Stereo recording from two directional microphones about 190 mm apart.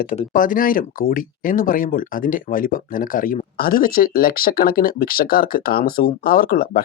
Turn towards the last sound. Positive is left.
turn(degrees=50)  # may be behind; listen again after turning